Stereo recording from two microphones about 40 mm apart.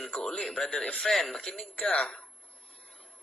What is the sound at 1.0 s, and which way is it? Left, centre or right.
Speech, centre.